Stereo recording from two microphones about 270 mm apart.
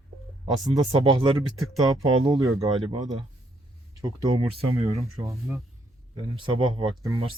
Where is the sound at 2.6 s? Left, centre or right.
Centre.